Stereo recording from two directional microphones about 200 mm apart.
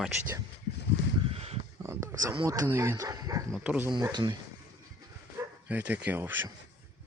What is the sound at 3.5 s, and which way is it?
Speech, 5° right (ahead or behind).